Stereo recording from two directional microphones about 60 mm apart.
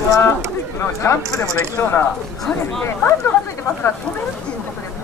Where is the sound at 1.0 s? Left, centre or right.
Left.